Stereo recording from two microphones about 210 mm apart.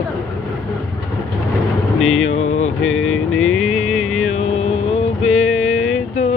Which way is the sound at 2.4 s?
75° left (ahead or behind).